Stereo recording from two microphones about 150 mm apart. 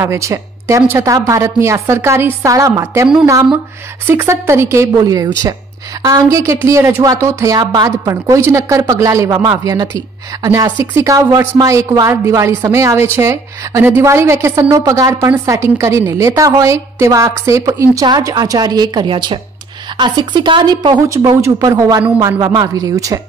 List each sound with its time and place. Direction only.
0.0 s a woman's voice: 20° right (ahead or behind)
4.1 s a woman's voice: 15° right (ahead or behind)